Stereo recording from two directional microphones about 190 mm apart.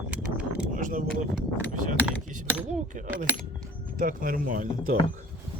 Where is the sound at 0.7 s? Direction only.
45° right (ahead or behind).